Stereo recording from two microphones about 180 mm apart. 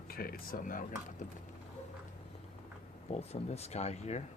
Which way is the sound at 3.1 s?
35° left (ahead or behind).